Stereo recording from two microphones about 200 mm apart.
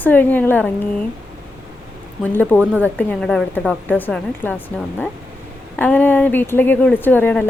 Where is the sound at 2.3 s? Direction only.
10° left (ahead or behind).